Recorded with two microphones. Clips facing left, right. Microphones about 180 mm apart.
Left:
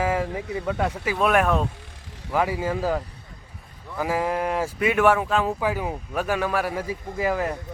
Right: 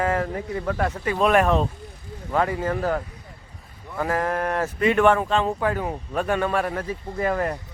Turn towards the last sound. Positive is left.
turn(degrees=5)  # may be behind; listen again after turning